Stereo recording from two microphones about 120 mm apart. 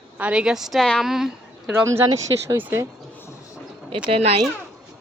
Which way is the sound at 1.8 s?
25° right (ahead or behind).